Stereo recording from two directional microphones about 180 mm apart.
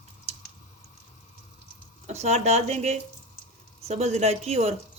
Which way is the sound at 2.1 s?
35° right (ahead or behind).